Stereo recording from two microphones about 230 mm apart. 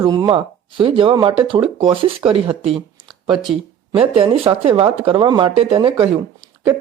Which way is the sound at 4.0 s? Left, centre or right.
Right.